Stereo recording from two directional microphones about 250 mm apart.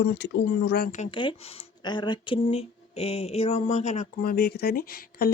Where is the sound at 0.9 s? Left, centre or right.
Left.